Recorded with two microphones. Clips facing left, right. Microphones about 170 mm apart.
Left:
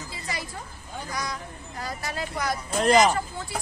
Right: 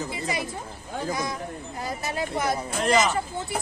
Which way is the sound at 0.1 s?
20° right (ahead or behind).